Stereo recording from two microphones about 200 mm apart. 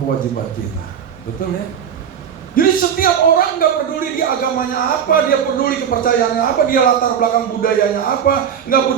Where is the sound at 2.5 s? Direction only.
45° left (ahead or behind).